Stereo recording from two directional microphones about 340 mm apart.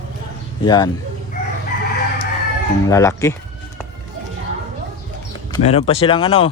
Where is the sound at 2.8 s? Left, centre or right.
Centre.